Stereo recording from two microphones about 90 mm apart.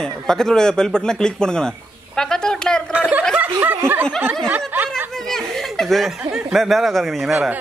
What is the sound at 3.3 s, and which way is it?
Snicker, 20° right (ahead or behind).